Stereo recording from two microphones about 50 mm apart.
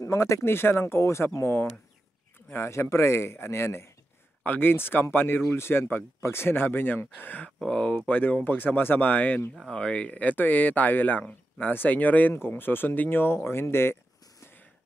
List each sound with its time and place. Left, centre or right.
0.0 s speech: left
4.5 s speech: left
5.4 s speech: left
7.6 s speech: left
8.1 s speech: left
9.7 s speech: left
12.4 s speech: left